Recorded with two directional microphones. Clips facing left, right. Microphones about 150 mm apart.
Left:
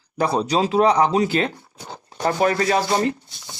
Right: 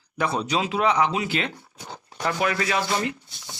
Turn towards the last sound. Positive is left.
turn(degrees=40)  # may be behind; listen again after turning